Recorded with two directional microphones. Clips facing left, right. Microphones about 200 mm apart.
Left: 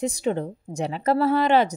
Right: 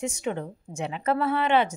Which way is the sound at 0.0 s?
35° left (ahead or behind).